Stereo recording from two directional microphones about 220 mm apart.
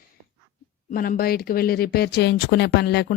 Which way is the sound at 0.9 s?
40° left (ahead or behind).